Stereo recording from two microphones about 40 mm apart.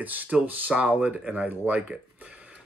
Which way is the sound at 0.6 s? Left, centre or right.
Right.